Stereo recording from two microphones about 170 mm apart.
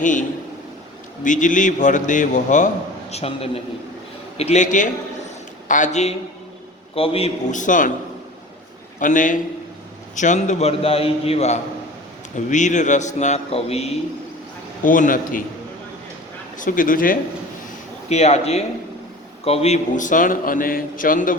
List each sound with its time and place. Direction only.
0.0 s a man's voice: 50° left (ahead or behind)
3.1 s a man's voice: 35° left (ahead or behind)
9.0 s a man's voice: 50° left (ahead or behind)
14.8 s a man's voice: 50° left (ahead or behind)
16.6 s a man's voice: 55° left (ahead or behind)
18.1 s a man's voice: 40° left (ahead or behind)